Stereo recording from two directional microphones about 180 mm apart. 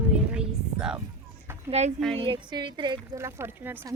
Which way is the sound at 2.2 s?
25° right (ahead or behind).